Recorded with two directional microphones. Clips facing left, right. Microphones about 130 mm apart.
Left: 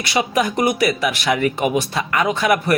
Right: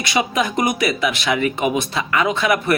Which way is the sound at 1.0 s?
45° left (ahead or behind).